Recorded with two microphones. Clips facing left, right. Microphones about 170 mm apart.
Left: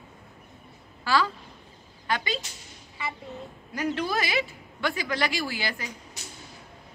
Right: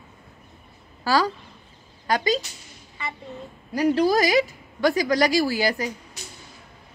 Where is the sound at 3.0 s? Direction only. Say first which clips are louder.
Even; 5° left (ahead or behind).